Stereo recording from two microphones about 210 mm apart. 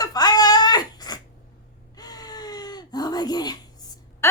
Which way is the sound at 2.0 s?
20° left (ahead or behind).